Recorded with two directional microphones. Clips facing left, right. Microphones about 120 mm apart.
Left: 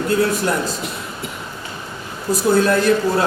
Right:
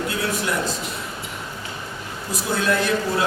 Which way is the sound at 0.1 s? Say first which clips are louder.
Left 8 dB; 40° left (ahead or behind).